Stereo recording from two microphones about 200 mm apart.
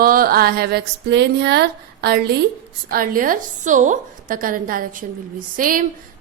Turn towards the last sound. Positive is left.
turn(degrees=-45)  # may be behind; listen again after turning